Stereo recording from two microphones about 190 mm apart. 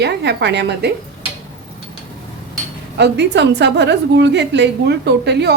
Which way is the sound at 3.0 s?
65° right (ahead or behind).